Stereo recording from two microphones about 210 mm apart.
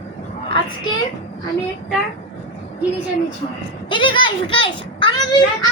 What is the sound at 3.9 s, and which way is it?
A child's voice, 25° left (ahead or behind).